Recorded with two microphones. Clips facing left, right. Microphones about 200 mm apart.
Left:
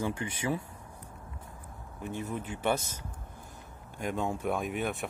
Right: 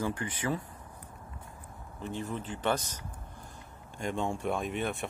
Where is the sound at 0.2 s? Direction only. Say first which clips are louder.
Even; 20° left (ahead or behind).